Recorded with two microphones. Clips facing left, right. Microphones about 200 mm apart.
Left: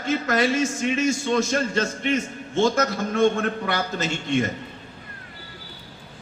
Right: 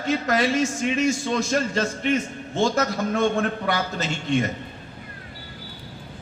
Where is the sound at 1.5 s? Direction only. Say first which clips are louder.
Even; 40° right (ahead or behind).